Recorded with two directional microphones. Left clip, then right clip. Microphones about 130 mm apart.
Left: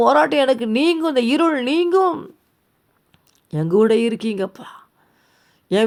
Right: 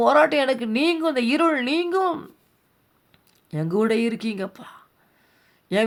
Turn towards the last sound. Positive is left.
turn(degrees=45)  # may be behind; listen again after turning